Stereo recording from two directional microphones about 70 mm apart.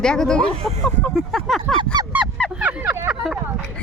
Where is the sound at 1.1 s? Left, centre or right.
Centre.